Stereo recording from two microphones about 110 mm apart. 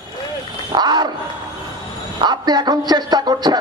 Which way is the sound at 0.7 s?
40° right (ahead or behind).